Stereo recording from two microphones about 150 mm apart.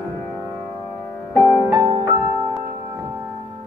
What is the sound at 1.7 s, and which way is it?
Music, 25° right (ahead or behind).